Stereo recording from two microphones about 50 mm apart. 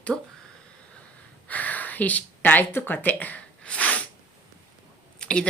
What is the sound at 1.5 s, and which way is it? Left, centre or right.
Speech, left.